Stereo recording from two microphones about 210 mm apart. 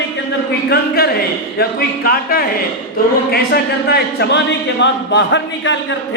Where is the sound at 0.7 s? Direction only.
50° left (ahead or behind).